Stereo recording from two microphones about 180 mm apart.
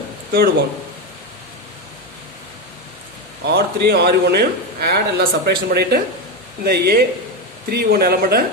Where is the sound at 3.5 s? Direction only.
65° right (ahead or behind).